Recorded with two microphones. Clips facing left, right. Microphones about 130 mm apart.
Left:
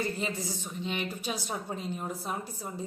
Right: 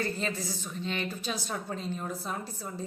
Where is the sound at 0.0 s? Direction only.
15° left (ahead or behind).